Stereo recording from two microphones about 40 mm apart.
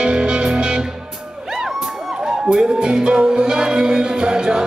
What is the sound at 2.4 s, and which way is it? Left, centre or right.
Music, centre.